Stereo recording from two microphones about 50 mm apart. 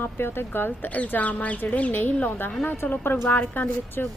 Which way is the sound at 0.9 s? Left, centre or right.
Left.